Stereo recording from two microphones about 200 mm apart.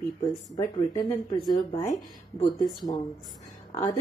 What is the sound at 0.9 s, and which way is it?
Speech, 25° left (ahead or behind).